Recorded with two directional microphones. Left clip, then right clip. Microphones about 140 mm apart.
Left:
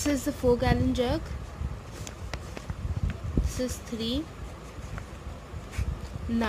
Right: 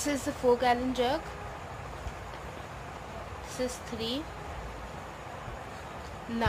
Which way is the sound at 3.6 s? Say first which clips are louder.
Right 2 dB; 55° left (ahead or behind).